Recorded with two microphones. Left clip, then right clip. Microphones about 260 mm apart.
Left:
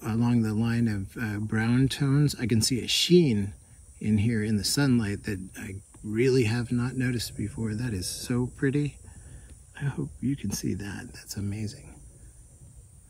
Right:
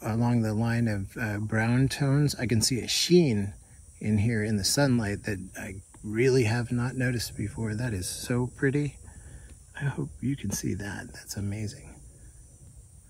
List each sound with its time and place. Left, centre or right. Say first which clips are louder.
0.1 s speech: left 2 dB; centre
2.6 s speech: left 2 dB; left
4.0 s speech: left 1 dB; centre